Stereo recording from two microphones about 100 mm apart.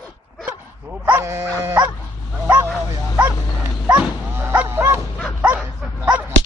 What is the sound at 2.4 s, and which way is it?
Bow-wow, 25° right (ahead or behind).